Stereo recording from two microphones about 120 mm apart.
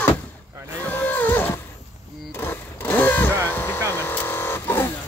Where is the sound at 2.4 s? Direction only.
15° left (ahead or behind).